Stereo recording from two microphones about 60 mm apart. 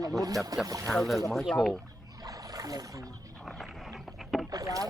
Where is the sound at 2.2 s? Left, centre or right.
Right.